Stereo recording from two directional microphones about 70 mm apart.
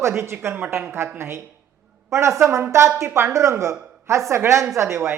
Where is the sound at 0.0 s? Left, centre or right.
Right.